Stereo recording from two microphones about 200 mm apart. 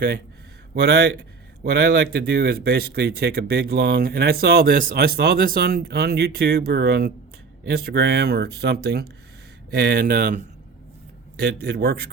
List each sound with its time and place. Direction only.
0.7 s speech: 55° right (ahead or behind)
11.3 s speech: 55° right (ahead or behind)